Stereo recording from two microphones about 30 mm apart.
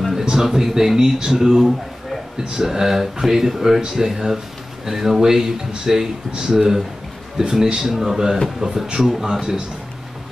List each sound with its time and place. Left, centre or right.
0.2 s speech: centre
5.2 s speech: centre